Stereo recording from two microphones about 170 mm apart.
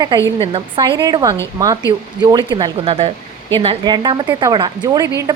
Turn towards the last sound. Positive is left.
turn(degrees=-25)  # may be behind; listen again after turning